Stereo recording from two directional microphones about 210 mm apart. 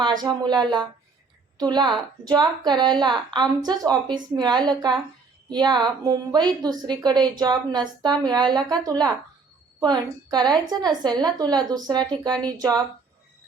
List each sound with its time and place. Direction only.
0.0 s a woman's voice: 20° right (ahead or behind)